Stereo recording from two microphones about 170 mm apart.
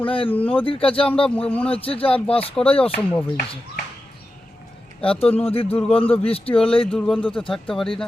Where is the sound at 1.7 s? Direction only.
35° left (ahead or behind).